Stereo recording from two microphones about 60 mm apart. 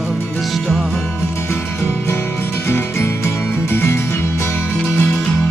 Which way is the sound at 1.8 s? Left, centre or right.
Left.